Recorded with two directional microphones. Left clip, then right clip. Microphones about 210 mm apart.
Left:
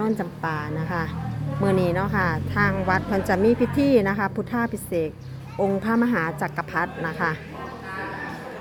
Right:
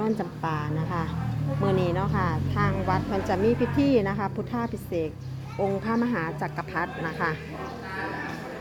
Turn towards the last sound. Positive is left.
turn(degrees=20)  # may be behind; listen again after turning